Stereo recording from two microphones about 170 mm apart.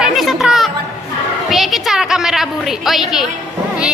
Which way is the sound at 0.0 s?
Centre (ahead or behind).